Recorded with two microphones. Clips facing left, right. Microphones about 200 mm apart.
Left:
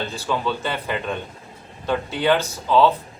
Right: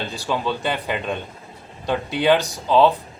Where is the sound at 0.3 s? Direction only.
15° right (ahead or behind).